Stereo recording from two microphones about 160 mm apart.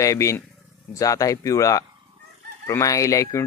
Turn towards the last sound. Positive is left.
turn(degrees=20)  # may be behind; listen again after turning